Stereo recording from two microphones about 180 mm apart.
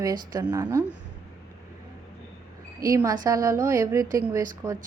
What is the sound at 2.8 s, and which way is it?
A woman's voice, 20° right (ahead or behind).